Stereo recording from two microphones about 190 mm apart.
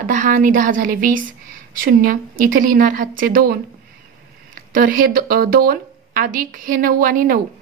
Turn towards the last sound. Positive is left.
turn(degrees=-50)  # may be behind; listen again after turning